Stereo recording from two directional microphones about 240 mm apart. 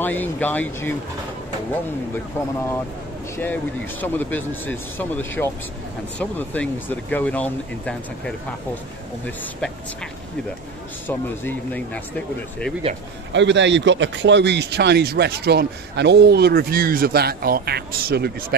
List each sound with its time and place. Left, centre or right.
0.0 s speech: centre
4.0 s speech: centre
11.1 s speech: centre
13.3 s speech: right